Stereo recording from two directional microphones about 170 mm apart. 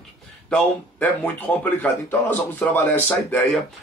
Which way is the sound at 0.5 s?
10° left (ahead or behind).